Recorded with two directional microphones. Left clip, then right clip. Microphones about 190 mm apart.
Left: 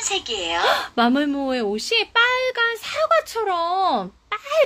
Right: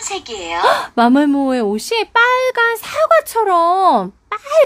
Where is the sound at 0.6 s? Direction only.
30° right (ahead or behind).